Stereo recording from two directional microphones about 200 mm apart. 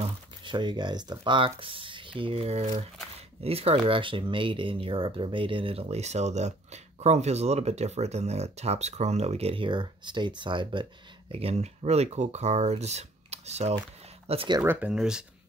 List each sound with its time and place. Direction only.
0.0 s speech: 20° right (ahead or behind)
14.6 s speech: 10° right (ahead or behind)